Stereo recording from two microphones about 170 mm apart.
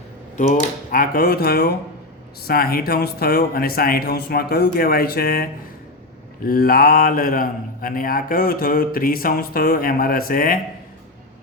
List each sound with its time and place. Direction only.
0.9 s speech: 55° left (ahead or behind)